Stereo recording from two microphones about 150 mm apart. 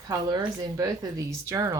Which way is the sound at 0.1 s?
25° right (ahead or behind).